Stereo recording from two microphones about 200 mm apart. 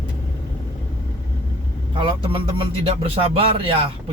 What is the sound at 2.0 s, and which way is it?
Speech, 25° right (ahead or behind).